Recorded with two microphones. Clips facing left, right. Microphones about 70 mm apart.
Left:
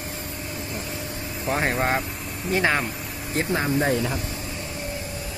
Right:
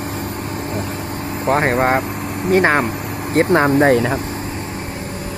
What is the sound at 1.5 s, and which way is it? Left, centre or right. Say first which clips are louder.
Speech: right 8 dB; right.